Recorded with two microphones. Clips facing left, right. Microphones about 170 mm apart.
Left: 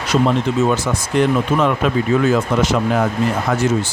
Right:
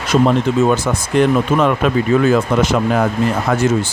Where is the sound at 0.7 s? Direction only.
55° right (ahead or behind).